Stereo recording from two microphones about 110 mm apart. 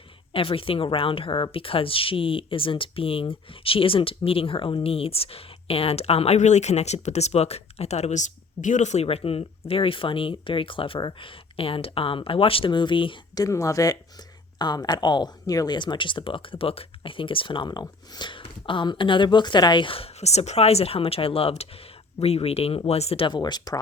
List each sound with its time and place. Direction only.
0.3 s speech: 55° left (ahead or behind)
13.3 s speech: 30° left (ahead or behind); by 23.2 s 70° left (ahead or behind)
23.2 s speech: 40° left (ahead or behind)